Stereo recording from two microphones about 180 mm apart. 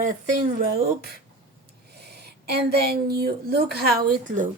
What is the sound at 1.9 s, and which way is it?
Speech, 65° right (ahead or behind).